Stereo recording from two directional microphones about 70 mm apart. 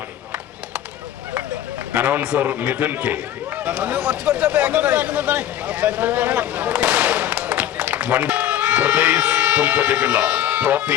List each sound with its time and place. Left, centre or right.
1.9 s a man's voice: right